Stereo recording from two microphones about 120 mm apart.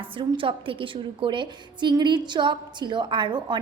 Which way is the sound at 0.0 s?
45° right (ahead or behind).